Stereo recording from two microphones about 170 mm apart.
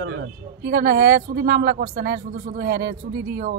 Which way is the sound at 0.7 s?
65° right (ahead or behind).